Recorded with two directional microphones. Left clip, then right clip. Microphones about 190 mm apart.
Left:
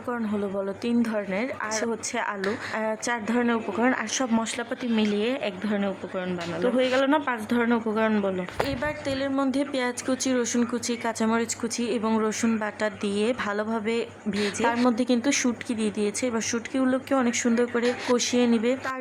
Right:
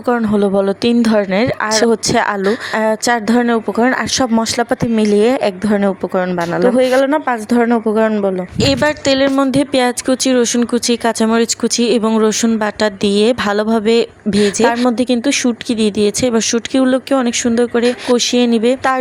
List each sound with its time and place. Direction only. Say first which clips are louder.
0.1 s speech: right 15 dB; 40° right (ahead or behind)
8.6 s speech: right 17 dB; 40° right (ahead or behind)